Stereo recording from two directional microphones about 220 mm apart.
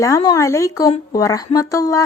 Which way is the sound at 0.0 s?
15° left (ahead or behind).